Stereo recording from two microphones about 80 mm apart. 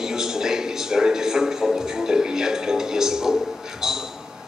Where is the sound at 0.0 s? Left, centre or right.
Centre.